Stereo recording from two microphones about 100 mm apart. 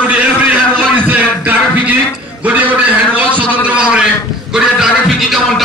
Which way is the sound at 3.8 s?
10° right (ahead or behind).